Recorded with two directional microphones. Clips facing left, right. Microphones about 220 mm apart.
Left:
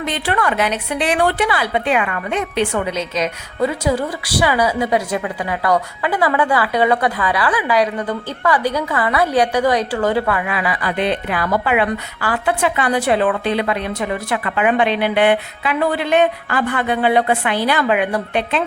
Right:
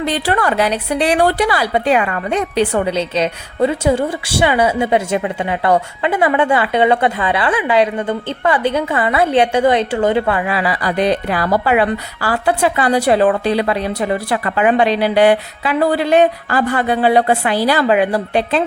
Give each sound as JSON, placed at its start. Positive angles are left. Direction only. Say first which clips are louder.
{"t": 0.0, "sound": "a woman's voice", "louder": "right 3 dB", "side_deg": -35}